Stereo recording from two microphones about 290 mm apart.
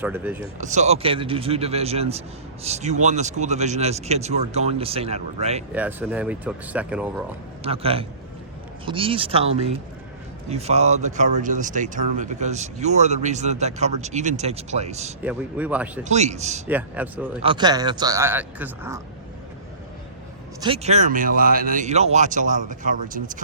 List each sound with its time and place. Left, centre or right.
0.0 s a man's voice: centre
0.6 s speech: right
5.7 s speech: centre
7.6 s speech: centre
15.2 s speech: centre
16.0 s speech: right
16.6 s speech: centre
17.4 s a man's voice: centre
20.6 s speech: centre